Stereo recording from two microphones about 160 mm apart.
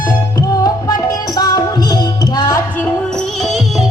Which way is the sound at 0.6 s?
25° left (ahead or behind).